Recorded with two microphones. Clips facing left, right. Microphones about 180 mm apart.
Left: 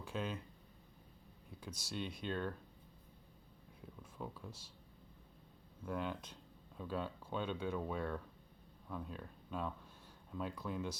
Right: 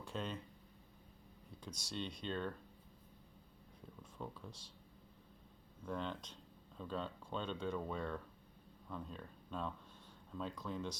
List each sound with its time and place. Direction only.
0.0 s speech: 5° left (ahead or behind)
1.5 s speech: 5° left (ahead or behind)
4.0 s speech: 5° left (ahead or behind)
5.8 s speech: 10° left (ahead or behind)